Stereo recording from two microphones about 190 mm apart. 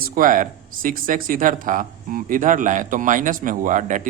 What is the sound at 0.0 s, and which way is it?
A man's voice, 50° right (ahead or behind).